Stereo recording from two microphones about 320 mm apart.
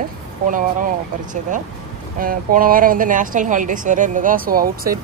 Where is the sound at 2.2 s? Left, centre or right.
Right.